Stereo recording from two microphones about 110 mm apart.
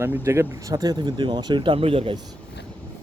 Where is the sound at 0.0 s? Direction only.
25° right (ahead or behind); by 2.1 s 60° right (ahead or behind).